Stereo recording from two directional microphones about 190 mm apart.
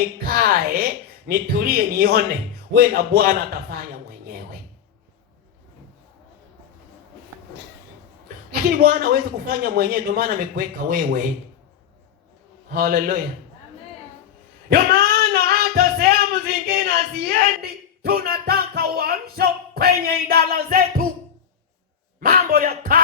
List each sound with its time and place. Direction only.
0.3 s speech: 50° right (ahead or behind)
8.8 s speech: 55° right (ahead or behind)
12.7 s speech: 50° right (ahead or behind)
14.7 s music: 55° right (ahead or behind)
16.6 s speech: 50° right (ahead or behind)
22.2 s speech: 50° right (ahead or behind)